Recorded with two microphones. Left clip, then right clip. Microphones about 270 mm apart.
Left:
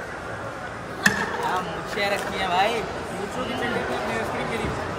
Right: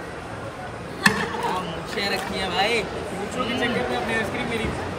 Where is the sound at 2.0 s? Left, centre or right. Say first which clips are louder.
Left 1 dB; centre.